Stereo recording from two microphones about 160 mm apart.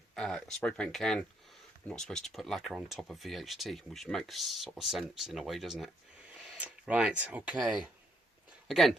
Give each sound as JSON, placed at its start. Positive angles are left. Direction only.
{"t": 0.1, "sound": "speech", "side_deg": 5}